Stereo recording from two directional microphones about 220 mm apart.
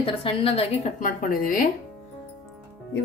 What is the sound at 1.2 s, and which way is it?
Speech, 40° left (ahead or behind).